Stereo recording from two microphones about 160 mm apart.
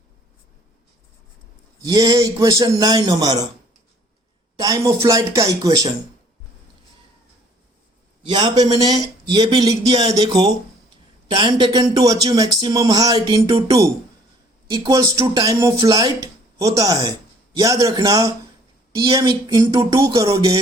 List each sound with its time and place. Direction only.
1.8 s speech: 25° right (ahead or behind)
4.5 s speech: 20° right (ahead or behind)
8.2 s a man's voice: 30° right (ahead or behind)